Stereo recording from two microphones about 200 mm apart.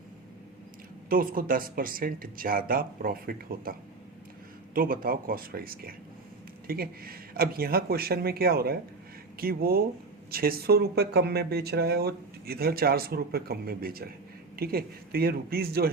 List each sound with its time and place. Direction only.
1.1 s speech: 45° right (ahead or behind)